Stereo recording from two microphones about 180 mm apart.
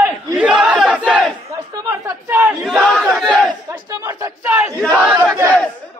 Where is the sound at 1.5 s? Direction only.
20° right (ahead or behind).